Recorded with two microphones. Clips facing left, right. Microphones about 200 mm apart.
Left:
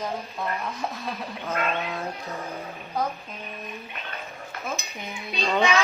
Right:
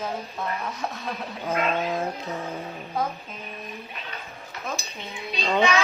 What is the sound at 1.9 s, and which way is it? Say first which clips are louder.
Speech: right 4 dB; 15° right (ahead or behind).